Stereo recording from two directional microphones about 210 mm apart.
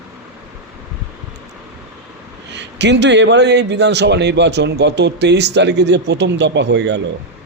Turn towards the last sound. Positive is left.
turn(degrees=-55)  # may be behind; listen again after turning